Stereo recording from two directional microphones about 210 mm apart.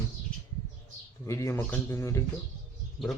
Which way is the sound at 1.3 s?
15° left (ahead or behind).